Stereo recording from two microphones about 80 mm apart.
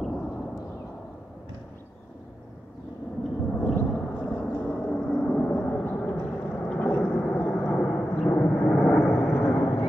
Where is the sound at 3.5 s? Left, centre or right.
Centre.